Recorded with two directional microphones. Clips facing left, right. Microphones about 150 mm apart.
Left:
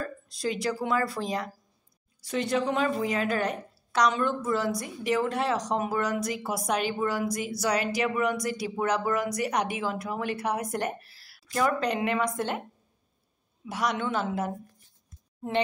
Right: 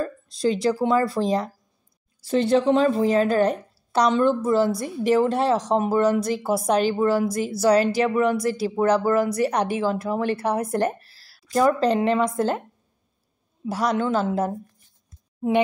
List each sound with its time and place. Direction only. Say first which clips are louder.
0.0 s a woman's voice: right 8 dB; 25° right (ahead or behind)
13.7 s a woman's voice: right 6 dB; 35° right (ahead or behind)